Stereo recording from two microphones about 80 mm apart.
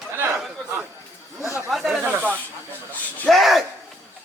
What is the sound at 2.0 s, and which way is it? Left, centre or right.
Snake, right.